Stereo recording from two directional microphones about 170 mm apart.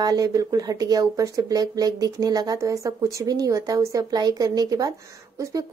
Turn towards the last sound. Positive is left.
turn(degrees=-20)  # may be behind; listen again after turning